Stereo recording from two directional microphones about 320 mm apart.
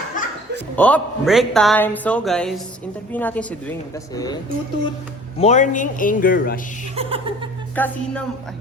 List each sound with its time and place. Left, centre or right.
0.2 s chuckle: left
0.8 s speech: centre
5.4 s a man's voice: left
6.9 s speech: centre